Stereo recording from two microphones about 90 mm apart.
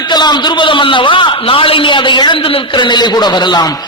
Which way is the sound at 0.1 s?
55° left (ahead or behind).